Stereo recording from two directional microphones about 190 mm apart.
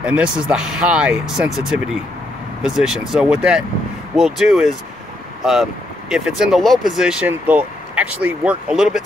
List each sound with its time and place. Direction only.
0.0 s speech: 5° right (ahead or behind)
2.7 s speech: centre (ahead or behind)